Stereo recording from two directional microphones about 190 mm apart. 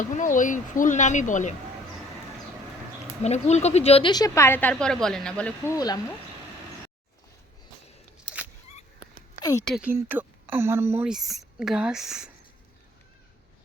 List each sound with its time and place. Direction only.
0.0 s speech: 40° left (ahead or behind)
3.2 s a woman's voice: 35° left (ahead or behind); by 5.7 s 5° left (ahead or behind)
5.7 s speech: 20° left (ahead or behind)
9.4 s a woman's voice: 15° left (ahead or behind)
9.6 s speech: 5° right (ahead or behind)